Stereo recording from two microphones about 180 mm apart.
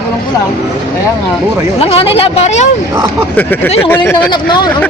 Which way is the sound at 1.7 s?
35° left (ahead or behind).